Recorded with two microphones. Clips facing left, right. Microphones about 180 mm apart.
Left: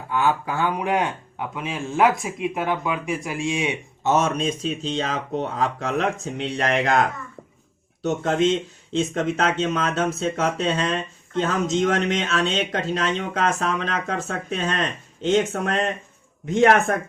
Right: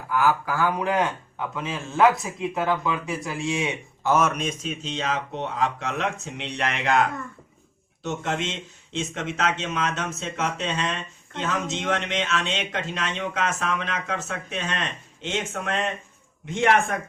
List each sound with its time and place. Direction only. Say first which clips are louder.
0.1 s speech: even; 25° left (ahead or behind); by 16.9 s 40° left (ahead or behind)